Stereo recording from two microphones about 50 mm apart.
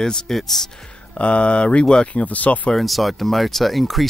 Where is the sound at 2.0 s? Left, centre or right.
Left.